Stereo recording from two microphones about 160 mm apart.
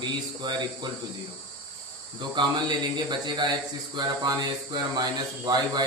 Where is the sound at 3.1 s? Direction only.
30° right (ahead or behind).